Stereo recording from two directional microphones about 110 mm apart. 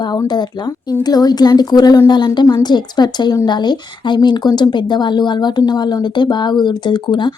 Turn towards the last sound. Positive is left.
turn(degrees=45)  # may be behind; listen again after turning